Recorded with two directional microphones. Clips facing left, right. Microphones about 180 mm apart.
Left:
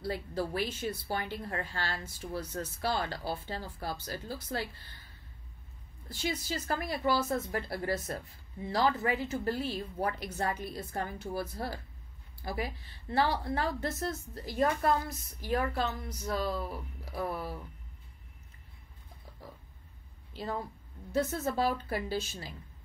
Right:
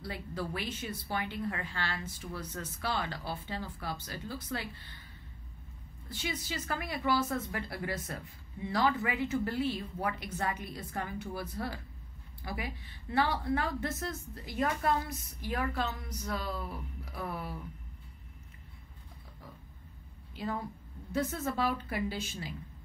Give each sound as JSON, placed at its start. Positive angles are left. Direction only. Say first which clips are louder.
{"t": 0.0, "sound": "a woman's voice", "louder": "left 4 dB", "side_deg": 35}
{"t": 6.0, "sound": "a woman's voice", "louder": "left 3 dB", "side_deg": 40}
{"t": 21.1, "sound": "a woman's voice", "louder": "left 2 dB", "side_deg": 35}